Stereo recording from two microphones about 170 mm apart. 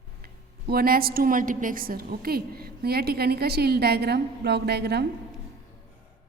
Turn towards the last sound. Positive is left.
turn(degrees=-75)  # may be behind; listen again after turning